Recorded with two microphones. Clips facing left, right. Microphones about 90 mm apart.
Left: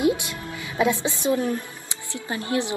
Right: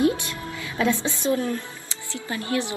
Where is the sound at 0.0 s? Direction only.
15° left (ahead or behind).